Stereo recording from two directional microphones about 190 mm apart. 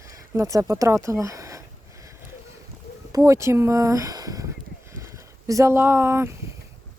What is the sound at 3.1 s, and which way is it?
Speech, 15° right (ahead or behind).